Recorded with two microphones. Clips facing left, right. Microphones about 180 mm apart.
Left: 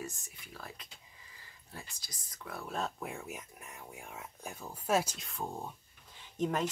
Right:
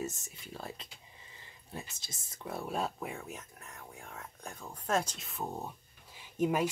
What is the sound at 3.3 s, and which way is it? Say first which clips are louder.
Speech: left 1 dB; 10° left (ahead or behind).